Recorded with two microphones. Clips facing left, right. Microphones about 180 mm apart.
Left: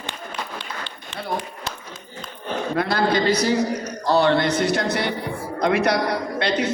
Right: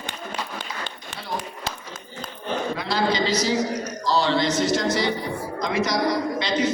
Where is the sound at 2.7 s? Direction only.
55° left (ahead or behind).